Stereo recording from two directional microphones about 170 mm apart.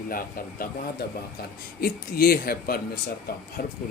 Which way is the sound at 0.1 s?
55° left (ahead or behind).